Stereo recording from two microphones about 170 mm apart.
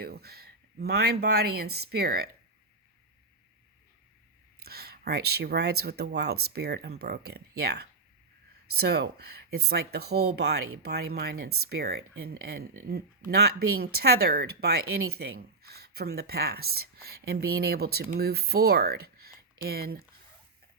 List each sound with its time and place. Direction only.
0.0 s speech: 65° right (ahead or behind)
4.6 s speech: 65° right (ahead or behind)